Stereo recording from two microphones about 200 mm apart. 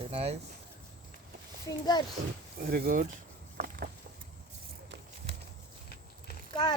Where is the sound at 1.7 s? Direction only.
20° left (ahead or behind).